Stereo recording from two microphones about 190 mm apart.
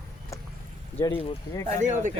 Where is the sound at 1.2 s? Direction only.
20° left (ahead or behind).